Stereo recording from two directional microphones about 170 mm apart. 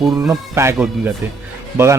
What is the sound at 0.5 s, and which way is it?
Speech, 15° right (ahead or behind).